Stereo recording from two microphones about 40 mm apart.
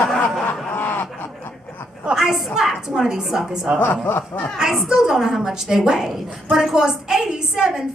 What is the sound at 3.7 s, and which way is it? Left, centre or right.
A woman's voice, right.